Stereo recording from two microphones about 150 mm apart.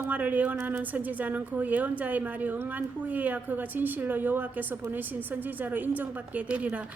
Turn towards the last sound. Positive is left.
turn(degrees=-10)  # may be behind; listen again after turning